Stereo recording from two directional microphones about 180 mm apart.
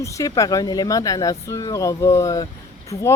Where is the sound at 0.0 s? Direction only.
15° left (ahead or behind).